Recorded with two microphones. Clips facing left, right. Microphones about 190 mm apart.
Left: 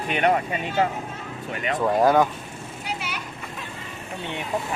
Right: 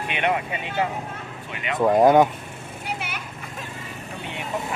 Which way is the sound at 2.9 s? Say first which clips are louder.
Even; 55° right (ahead or behind).